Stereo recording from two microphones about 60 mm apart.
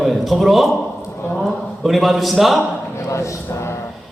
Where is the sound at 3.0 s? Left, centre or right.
Left.